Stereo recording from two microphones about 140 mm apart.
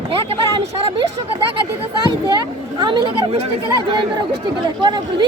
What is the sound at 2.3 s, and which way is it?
Speech, 30° right (ahead or behind).